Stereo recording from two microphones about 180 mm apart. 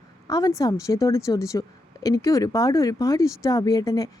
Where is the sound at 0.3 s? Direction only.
20° left (ahead or behind).